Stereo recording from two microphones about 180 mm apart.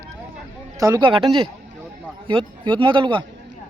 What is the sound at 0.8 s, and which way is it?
A man's voice, 25° right (ahead or behind).